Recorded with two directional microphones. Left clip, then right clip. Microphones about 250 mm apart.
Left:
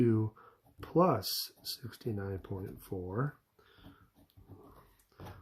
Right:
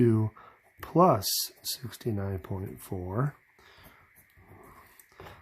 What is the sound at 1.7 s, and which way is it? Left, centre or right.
Speech, right.